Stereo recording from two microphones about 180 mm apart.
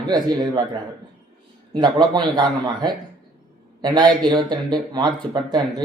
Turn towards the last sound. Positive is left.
turn(degrees=-25)  # may be behind; listen again after turning